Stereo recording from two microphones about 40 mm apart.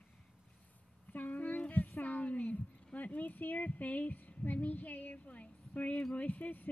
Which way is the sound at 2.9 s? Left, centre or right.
Left.